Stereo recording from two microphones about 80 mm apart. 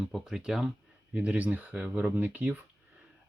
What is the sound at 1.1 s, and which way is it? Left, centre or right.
Speech, centre.